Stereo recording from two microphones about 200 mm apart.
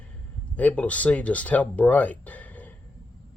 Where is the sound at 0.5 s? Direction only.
5° left (ahead or behind).